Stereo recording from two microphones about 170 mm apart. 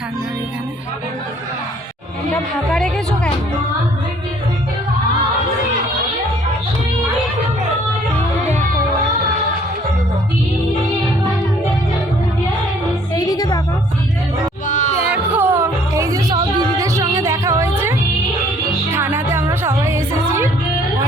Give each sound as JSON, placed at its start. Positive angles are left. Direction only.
{"t": 2.3, "sound": "a woman's voice", "side_deg": 5}
{"t": 13.1, "sound": "music", "side_deg": 20}
{"t": 14.7, "sound": "music", "side_deg": 45}
{"t": 15.1, "sound": "music", "side_deg": -15}